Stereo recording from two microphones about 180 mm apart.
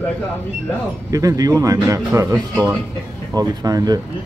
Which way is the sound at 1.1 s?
20° right (ahead or behind).